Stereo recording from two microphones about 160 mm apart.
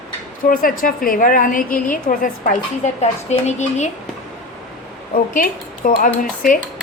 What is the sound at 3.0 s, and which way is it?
Speech, 45° left (ahead or behind).